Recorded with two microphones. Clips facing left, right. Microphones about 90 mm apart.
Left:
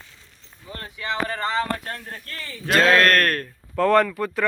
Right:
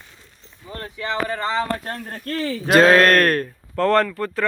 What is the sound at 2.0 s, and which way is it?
Speech, 40° right (ahead or behind).